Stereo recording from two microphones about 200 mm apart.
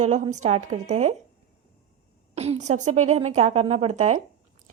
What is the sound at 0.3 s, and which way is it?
Speech, 35° right (ahead or behind).